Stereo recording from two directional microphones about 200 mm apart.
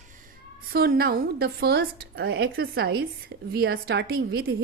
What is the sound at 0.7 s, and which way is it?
A woman's voice, 50° right (ahead or behind).